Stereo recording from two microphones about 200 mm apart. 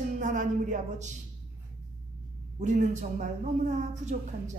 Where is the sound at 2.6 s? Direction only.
40° right (ahead or behind).